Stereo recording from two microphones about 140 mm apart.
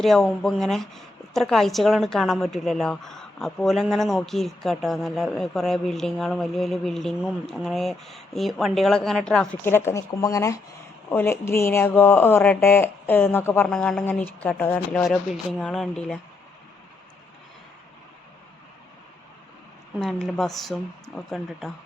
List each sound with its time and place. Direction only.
0.0 s a woman's voice: centre (ahead or behind)
9.6 s speech: 15° left (ahead or behind)
13.7 s a woman's voice: 5° left (ahead or behind)
15.0 s a woman's voice: centre (ahead or behind)
20.0 s a woman's voice: 5° left (ahead or behind)